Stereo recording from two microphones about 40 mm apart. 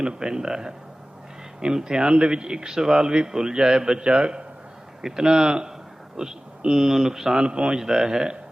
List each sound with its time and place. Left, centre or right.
0.0 s a man's voice: right
7.4 s speech: right
7.8 s a man's voice: centre